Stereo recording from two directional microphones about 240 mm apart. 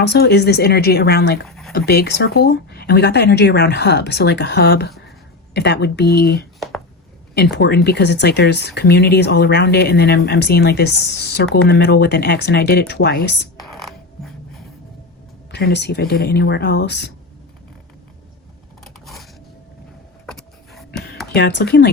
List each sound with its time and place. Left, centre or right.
0.0 s speech: left
1.5 s a sound: centre
1.7 s speech: left
6.6 s a sound: centre
7.3 s speech: left
13.6 s music: centre
15.5 s speech: left
18.9 s a sound: centre
21.3 s speech: left